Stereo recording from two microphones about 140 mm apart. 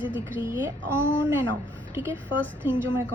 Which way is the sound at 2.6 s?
15° right (ahead or behind).